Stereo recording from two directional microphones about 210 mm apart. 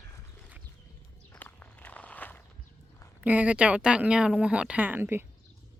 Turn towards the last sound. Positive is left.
turn(degrees=-10)  # may be behind; listen again after turning